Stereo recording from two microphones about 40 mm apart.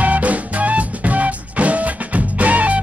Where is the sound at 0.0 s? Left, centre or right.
Right.